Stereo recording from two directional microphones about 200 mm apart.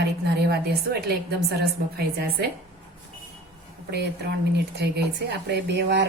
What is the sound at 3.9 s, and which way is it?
Speech, 55° right (ahead or behind).